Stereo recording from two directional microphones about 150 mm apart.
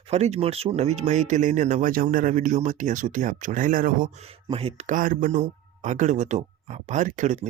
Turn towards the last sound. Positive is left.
turn(degrees=-50)  # may be behind; listen again after turning